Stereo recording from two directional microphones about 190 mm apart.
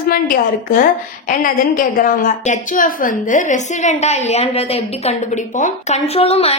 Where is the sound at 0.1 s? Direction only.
50° left (ahead or behind).